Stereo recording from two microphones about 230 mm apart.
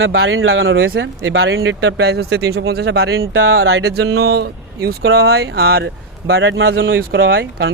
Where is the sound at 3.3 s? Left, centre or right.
Right.